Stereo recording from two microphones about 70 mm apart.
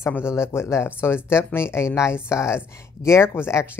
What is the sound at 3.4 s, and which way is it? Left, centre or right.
Speech, centre.